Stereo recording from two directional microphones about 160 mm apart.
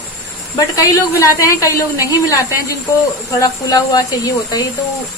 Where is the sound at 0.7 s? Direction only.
20° left (ahead or behind).